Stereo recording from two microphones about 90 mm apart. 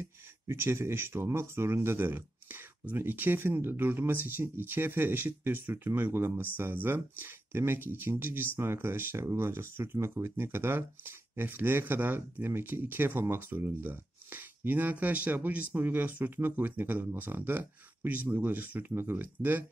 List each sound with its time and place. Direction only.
0.5 s speech: 30° right (ahead or behind)